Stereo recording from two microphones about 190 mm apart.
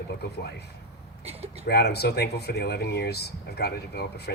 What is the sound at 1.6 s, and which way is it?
Speech, 60° left (ahead or behind).